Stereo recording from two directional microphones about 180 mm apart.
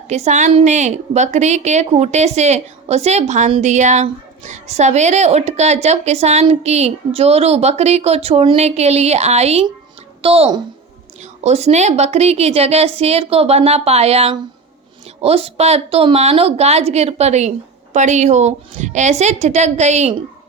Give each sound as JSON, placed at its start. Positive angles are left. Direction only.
{"t": 0.1, "sound": "a woman's voice", "side_deg": -40}